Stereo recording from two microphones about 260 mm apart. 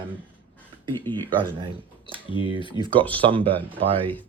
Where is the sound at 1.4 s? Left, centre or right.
Centre.